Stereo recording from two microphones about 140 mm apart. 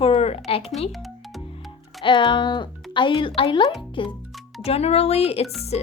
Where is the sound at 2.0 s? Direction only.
35° left (ahead or behind).